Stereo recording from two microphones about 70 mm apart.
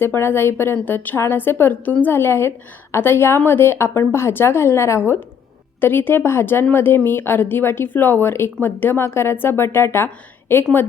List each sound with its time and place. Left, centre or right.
0.0 s a woman's voice: left
5.8 s a woman's voice: left